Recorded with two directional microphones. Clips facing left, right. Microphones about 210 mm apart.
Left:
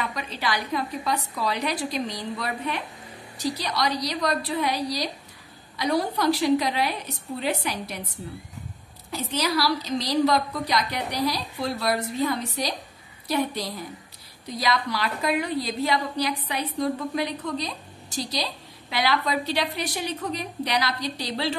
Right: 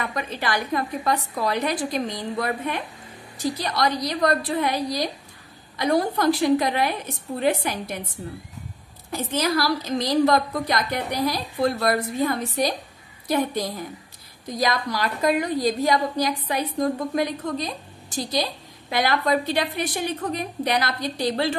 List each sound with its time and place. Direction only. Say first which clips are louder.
0.0 s a woman's voice: right 2 dB; 50° right (ahead or behind)
9.1 s a woman's voice: right 3 dB; 50° right (ahead or behind)
14.6 s a woman's voice: right 2 dB; 45° right (ahead or behind)